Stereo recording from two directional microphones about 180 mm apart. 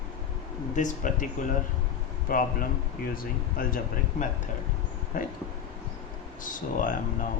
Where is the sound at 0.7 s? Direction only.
45° left (ahead or behind).